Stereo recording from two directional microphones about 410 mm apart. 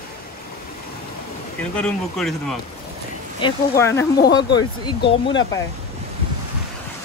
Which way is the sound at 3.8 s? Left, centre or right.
Centre.